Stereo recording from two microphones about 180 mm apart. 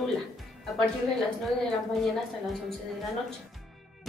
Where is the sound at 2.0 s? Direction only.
Centre (ahead or behind).